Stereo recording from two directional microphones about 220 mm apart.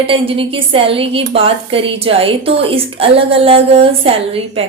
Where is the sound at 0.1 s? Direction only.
25° right (ahead or behind).